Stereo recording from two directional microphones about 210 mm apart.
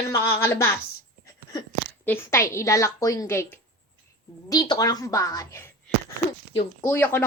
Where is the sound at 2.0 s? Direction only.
10° left (ahead or behind).